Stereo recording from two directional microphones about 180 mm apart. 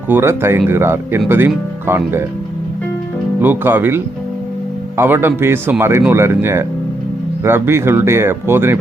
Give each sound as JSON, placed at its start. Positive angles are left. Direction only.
{"t": 0.1, "sound": "speech", "side_deg": -15}
{"t": 3.4, "sound": "speech", "side_deg": -10}